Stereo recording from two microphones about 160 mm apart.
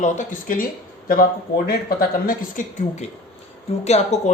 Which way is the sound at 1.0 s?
65° left (ahead or behind).